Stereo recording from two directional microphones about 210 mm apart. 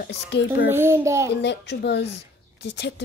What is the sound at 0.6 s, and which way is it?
Speech, 10° right (ahead or behind).